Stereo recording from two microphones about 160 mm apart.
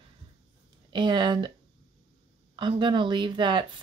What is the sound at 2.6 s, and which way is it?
Speech, 30° right (ahead or behind).